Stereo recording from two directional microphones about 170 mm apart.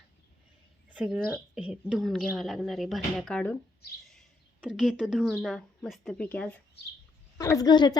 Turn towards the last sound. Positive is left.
turn(degrees=25)  # may be behind; listen again after turning